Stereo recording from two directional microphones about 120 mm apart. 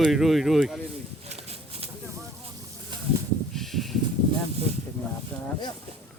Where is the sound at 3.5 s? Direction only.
Centre (ahead or behind).